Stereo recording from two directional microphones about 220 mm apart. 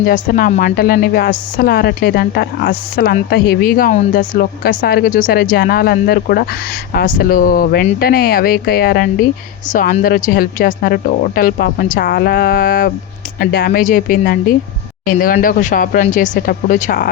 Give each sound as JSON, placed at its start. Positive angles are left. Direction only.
{"t": 0.0, "sound": "a woman's voice", "side_deg": 40}